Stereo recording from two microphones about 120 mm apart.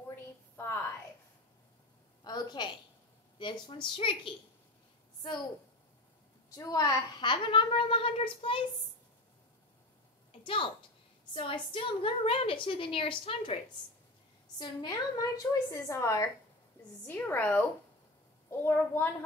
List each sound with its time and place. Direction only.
0.1 s a sound: 20° left (ahead or behind)
2.2 s a woman's voice: 35° left (ahead or behind)
6.5 s a woman's voice: 30° left (ahead or behind); by 8.6 s 45° left (ahead or behind)
10.4 s a woman's voice: 45° left (ahead or behind)
14.6 s a woman's voice: 35° left (ahead or behind); by 19.0 s 20° left (ahead or behind)